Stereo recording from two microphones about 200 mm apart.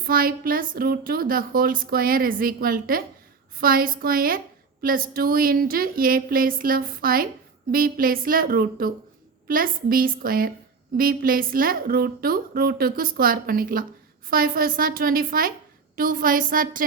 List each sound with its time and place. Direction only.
0.0 s speech: 45° right (ahead or behind)